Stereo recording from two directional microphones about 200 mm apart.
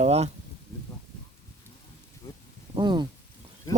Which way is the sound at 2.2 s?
15° left (ahead or behind).